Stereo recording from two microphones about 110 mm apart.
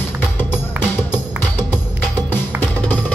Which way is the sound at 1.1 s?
20° left (ahead or behind).